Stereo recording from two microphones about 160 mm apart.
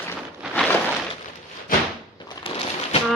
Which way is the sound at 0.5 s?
10° left (ahead or behind).